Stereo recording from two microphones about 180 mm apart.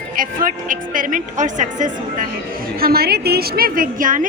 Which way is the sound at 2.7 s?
60° right (ahead or behind).